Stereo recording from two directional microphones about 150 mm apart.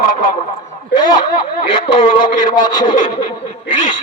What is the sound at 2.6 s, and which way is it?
Speech, 30° left (ahead or behind).